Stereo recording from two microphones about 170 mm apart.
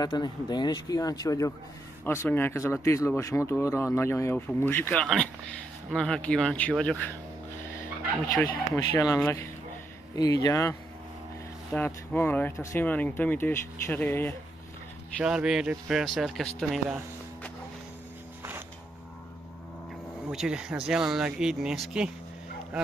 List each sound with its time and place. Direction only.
0.0 s speech: 25° left (ahead or behind); by 7.2 s 5° left (ahead or behind)
8.7 s speech: 20° left (ahead or behind)
15.2 s speech: 5° right (ahead or behind)
20.2 s speech: 5° right (ahead or behind)